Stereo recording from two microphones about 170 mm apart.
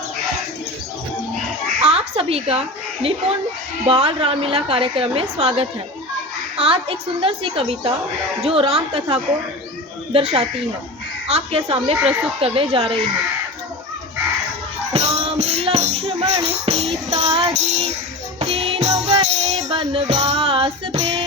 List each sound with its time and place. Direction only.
1.8 s a sound: 35° right (ahead or behind)
3.8 s a woman's voice: 35° right (ahead or behind)
14.9 s music: 35° right (ahead or behind)
17.1 s a woman's voice: 40° right (ahead or behind)
18.3 s music: 40° right (ahead or behind)
19.7 s a woman's voice: 30° right (ahead or behind)